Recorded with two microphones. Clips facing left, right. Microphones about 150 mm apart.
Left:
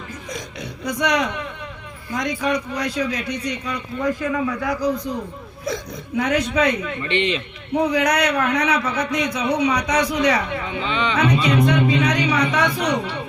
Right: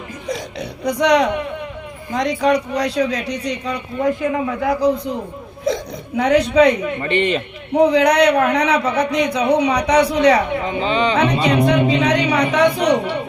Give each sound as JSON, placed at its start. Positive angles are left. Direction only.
{"t": 0.3, "sound": "a man's voice", "side_deg": -35}
{"t": 7.0, "sound": "speech", "side_deg": -45}
{"t": 7.9, "sound": "a man's voice", "side_deg": -30}